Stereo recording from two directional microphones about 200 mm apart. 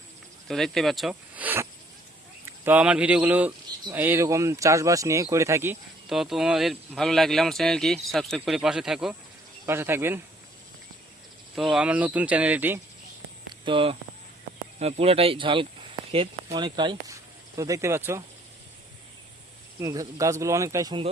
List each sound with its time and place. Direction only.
0.4 s speech: centre (ahead or behind)
2.6 s speech: 5° right (ahead or behind)
6.1 s speech: centre (ahead or behind)
11.5 s speech: centre (ahead or behind)
13.7 s speech: 25° right (ahead or behind)
19.8 s speech: 15° right (ahead or behind)